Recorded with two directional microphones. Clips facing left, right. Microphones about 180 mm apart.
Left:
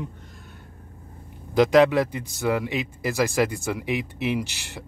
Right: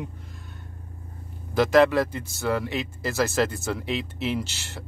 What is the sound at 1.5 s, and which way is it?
A man's voice, 15° left (ahead or behind).